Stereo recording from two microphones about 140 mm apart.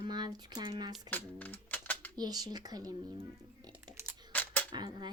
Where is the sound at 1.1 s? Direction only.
10° left (ahead or behind).